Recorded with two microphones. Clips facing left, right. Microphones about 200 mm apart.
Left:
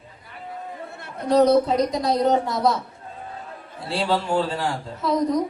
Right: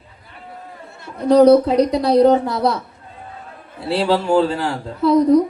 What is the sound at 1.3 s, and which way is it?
A woman's voice, 65° right (ahead or behind).